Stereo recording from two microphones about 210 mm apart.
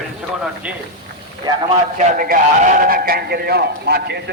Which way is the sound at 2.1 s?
40° right (ahead or behind).